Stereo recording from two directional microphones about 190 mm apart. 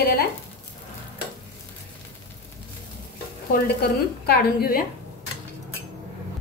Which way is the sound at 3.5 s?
55° left (ahead or behind).